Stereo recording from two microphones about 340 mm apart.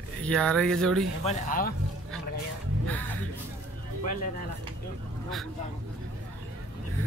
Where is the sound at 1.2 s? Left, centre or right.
Left.